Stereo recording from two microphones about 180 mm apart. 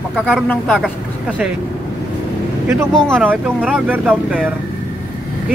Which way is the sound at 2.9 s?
Centre (ahead or behind).